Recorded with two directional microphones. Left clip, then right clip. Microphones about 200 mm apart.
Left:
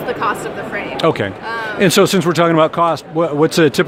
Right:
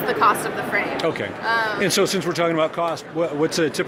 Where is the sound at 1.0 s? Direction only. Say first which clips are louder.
Left 7 dB; 50° left (ahead or behind).